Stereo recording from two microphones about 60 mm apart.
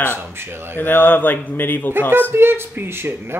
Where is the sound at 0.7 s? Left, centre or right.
Left.